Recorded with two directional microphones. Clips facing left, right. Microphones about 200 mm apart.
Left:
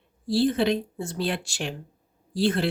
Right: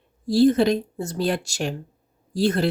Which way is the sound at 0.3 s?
40° right (ahead or behind).